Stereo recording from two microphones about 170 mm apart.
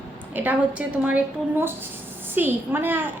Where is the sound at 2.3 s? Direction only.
10° right (ahead or behind).